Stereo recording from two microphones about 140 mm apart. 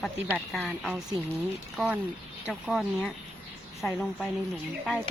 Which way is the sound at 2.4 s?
5° right (ahead or behind).